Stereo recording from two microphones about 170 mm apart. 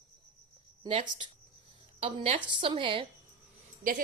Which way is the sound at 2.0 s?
35° right (ahead or behind).